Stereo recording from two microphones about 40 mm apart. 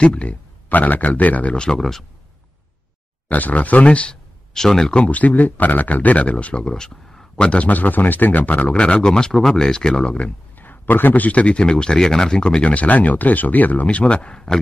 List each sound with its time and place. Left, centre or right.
0.0 s speech: left
0.7 s speech: left
1.8 s speech: centre
3.3 s speech: left
4.1 s a sound: centre
4.9 s speech: left
6.7 s speech: centre
7.3 s speech: left
7.6 s speech: left
8.6 s speech: left
10.5 s speech: left; by 12.6 s centre
12.6 s speech: left
13.8 s speech: left